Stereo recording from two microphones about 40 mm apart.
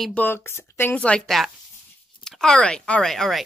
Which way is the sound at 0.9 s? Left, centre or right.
Left.